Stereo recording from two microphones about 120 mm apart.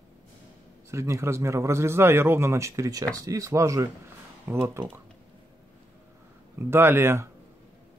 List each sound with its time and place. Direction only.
0.8 s a man's voice: 25° right (ahead or behind)
6.7 s a man's voice: 20° right (ahead or behind)